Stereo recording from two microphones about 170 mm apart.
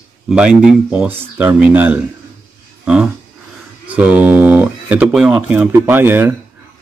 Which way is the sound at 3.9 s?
10° right (ahead or behind).